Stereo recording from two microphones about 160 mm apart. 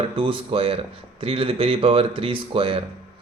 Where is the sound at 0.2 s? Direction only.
35° right (ahead or behind).